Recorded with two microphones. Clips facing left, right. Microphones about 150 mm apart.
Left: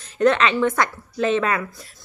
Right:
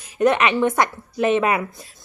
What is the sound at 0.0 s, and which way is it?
A woman's voice, 15° right (ahead or behind).